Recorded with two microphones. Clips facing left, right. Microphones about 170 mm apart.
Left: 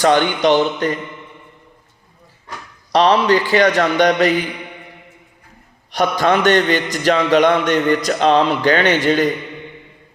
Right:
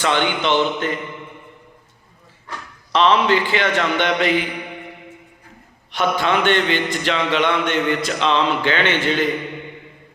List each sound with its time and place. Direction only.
0.0 s a man's voice: 40° left (ahead or behind)
2.9 s a man's voice: 40° left (ahead or behind)
5.9 s a man's voice: 40° left (ahead or behind)